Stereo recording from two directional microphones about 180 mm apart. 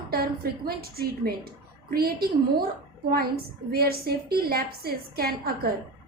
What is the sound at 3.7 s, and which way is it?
A woman's voice, 60° right (ahead or behind).